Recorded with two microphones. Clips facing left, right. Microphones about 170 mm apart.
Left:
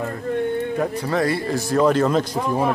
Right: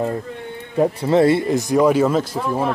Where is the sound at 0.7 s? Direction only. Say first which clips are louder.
Right 6 dB; 25° right (ahead or behind).